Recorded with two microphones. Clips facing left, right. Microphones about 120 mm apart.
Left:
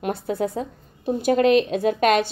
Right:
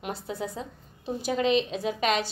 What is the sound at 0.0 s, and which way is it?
A woman's voice, 55° left (ahead or behind).